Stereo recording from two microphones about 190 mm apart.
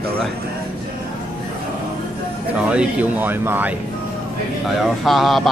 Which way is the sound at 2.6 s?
10° right (ahead or behind).